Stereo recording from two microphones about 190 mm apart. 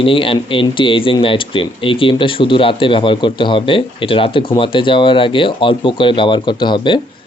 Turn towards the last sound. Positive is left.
turn(degrees=25)  # may be behind; listen again after turning